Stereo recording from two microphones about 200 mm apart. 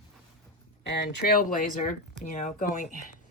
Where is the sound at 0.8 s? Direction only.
55° left (ahead or behind).